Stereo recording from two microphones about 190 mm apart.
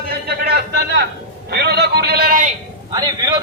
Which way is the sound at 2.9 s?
20° right (ahead or behind).